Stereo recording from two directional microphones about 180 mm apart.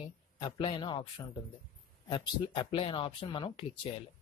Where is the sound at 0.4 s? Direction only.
30° left (ahead or behind).